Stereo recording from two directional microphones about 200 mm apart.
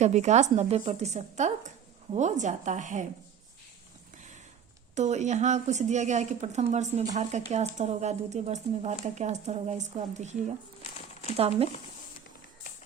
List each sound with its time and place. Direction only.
0.0 s speech: 35° right (ahead or behind)
4.9 s speech: 35° right (ahead or behind)
11.3 s speech: 30° right (ahead or behind)